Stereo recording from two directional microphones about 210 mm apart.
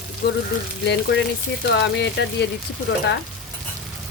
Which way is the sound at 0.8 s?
55° left (ahead or behind).